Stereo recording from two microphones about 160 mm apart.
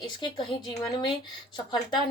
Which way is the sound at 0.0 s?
30° left (ahead or behind).